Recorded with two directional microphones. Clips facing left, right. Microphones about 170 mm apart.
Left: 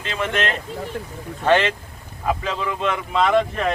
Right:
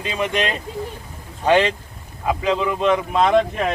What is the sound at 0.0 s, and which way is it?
Speech, 15° right (ahead or behind).